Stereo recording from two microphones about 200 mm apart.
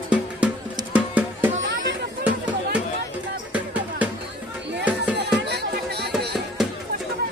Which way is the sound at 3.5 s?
5° right (ahead or behind).